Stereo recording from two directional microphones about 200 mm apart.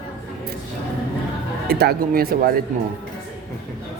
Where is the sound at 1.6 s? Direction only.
50° right (ahead or behind).